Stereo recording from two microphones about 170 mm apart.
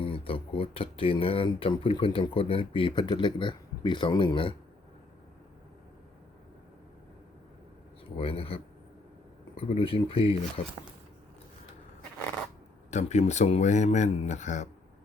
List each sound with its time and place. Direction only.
0.0 s speech: 35° left (ahead or behind)
8.1 s speech: 35° left (ahead or behind)
12.9 s speech: 40° left (ahead or behind)